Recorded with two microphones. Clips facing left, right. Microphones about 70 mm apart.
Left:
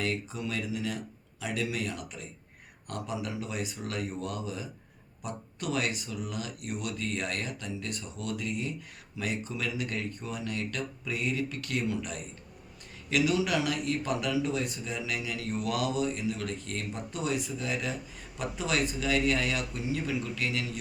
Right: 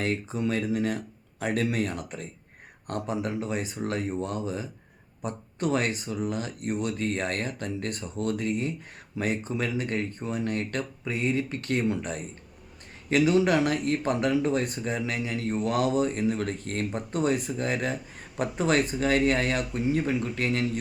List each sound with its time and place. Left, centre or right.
0.0 s speech: right